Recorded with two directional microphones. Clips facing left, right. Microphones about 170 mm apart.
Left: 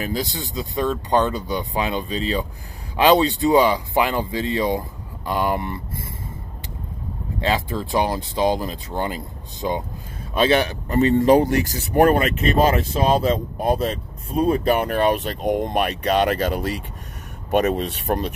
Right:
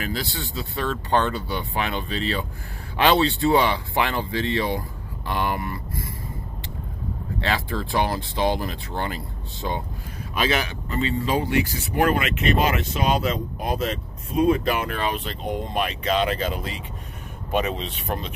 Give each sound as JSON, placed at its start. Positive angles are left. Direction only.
{"t": 0.0, "sound": "speech", "side_deg": 20}
{"t": 7.3, "sound": "speech", "side_deg": 20}
{"t": 10.3, "sound": "speech", "side_deg": 30}
{"t": 15.5, "sound": "speech", "side_deg": 55}